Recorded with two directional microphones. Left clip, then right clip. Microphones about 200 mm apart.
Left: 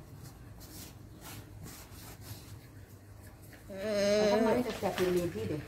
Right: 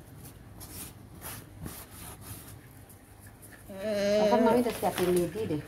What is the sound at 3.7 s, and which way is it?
Sheep, 5° left (ahead or behind).